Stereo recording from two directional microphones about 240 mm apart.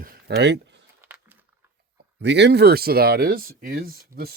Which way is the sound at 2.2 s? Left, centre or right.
Right.